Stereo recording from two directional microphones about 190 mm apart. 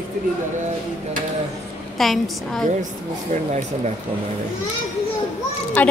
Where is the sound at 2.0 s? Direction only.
Centre (ahead or behind).